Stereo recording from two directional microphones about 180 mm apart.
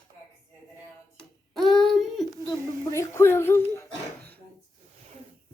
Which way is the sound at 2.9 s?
15° left (ahead or behind).